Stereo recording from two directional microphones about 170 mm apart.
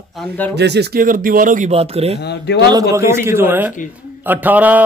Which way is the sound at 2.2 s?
80° left.